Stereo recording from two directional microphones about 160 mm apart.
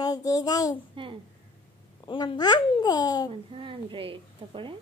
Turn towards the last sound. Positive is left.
turn(degrees=-35)  # may be behind; listen again after turning